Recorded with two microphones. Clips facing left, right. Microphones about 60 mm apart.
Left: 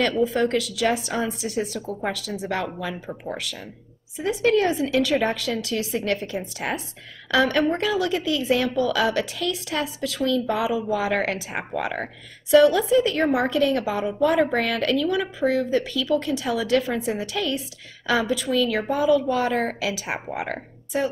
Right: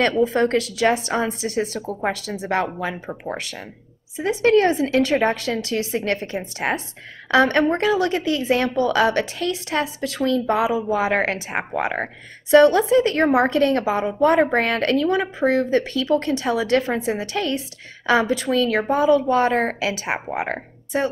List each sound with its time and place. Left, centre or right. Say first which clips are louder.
0.2 s speech: right 3 dB; right
2.0 s a woman's voice: right 4 dB; right
12.5 s a woman's voice: right 3 dB; right
20.2 s speech: right 4 dB; right